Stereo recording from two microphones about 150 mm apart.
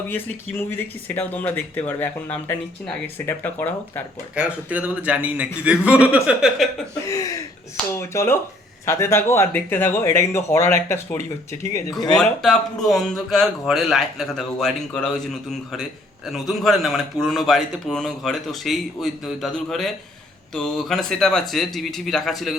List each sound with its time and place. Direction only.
1.0 s speech: 10° left (ahead or behind)
4.4 s a man's voice: 10° right (ahead or behind)
7.1 s speech: 25° left (ahead or behind)
12.1 s a man's voice: 5° left (ahead or behind)